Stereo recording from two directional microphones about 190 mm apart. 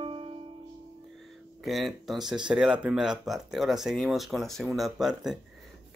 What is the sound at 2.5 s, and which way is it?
Speech, 5° right (ahead or behind).